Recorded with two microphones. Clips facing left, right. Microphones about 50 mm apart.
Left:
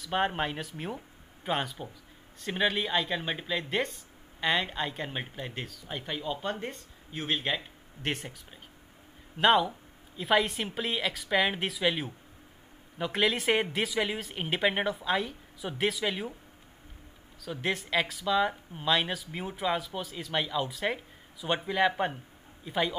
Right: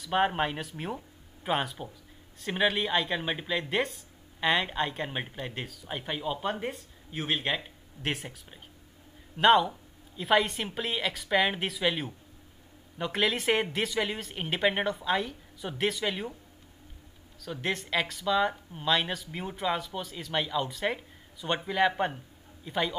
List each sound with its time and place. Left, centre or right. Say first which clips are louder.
0.0 s speech: right 2 dB; centre
17.4 s speech: even; centre